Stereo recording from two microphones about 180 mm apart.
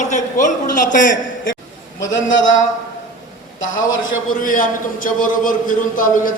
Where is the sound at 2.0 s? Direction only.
90° left.